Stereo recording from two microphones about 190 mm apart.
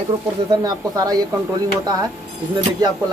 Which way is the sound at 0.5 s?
20° right (ahead or behind).